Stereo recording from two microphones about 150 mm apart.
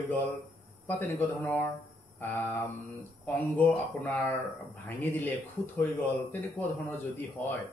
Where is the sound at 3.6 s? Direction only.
10° left (ahead or behind).